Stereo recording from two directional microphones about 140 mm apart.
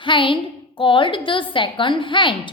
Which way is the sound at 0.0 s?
35° left (ahead or behind).